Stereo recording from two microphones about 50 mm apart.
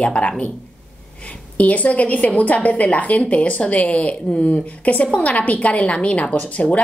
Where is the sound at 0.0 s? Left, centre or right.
Left.